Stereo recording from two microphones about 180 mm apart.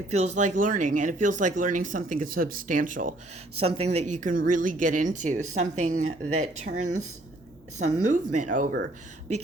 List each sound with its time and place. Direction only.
0.1 s speech: 40° right (ahead or behind)
3.6 s speech: 35° right (ahead or behind)
7.9 s speech: 45° right (ahead or behind)